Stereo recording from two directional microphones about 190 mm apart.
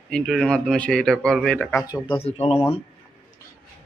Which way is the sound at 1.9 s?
25° left (ahead or behind).